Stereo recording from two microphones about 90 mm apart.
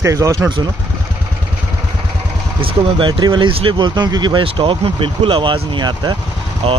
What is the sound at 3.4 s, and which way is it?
Speech, 85° right.